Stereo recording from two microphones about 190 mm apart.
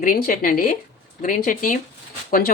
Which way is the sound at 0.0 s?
45° left (ahead or behind).